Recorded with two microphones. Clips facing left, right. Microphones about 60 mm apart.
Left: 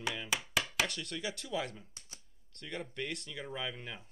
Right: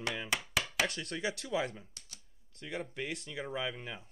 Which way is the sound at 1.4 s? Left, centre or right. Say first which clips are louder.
Right 2 dB; right.